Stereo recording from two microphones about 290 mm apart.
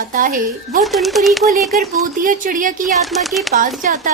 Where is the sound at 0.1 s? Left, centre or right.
Right.